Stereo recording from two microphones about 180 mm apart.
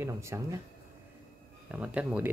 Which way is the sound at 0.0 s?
15° right (ahead or behind).